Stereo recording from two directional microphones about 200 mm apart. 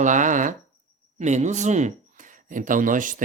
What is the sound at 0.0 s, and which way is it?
Speech, 40° right (ahead or behind).